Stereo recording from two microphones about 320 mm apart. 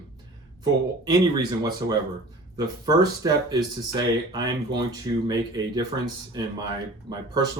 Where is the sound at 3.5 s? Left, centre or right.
Centre.